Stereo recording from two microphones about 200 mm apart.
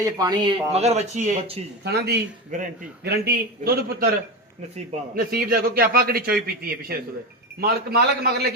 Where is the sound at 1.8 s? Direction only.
55° right (ahead or behind).